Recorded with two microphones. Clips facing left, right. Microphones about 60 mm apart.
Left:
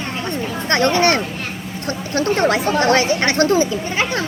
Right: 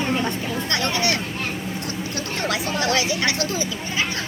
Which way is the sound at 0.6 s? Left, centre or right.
Left.